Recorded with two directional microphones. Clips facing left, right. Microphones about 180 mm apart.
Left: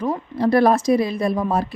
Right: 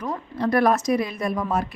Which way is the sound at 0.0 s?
30° left (ahead or behind).